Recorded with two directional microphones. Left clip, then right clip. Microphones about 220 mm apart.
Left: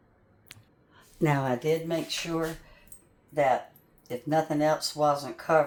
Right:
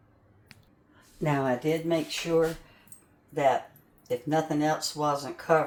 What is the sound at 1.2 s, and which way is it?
Speech, 50° left (ahead or behind).